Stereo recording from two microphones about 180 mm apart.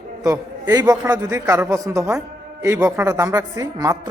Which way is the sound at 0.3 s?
20° right (ahead or behind).